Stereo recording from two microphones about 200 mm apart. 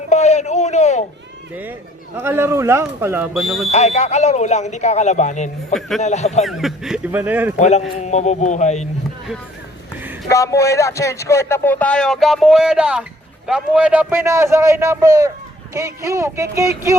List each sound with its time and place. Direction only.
0.1 s a sound: 35° left (ahead or behind)
2.1 s a man's voice: 10° right (ahead or behind)
3.7 s speech: 35° left (ahead or behind)
6.4 s speech: centre (ahead or behind)
7.6 s speech: 35° left (ahead or behind)
10.2 s a man's voice: 15° left (ahead or behind); by 17.0 s 15° right (ahead or behind)